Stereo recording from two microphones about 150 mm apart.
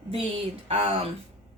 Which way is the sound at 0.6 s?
40° right (ahead or behind).